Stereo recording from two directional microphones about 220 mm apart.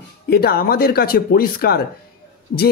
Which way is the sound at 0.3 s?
45° left (ahead or behind).